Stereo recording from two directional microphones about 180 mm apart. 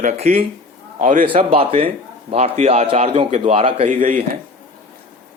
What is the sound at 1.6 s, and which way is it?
A man's voice, 30° right (ahead or behind).